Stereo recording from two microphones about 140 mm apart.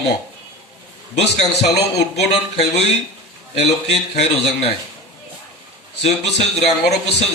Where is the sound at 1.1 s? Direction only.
50° left (ahead or behind).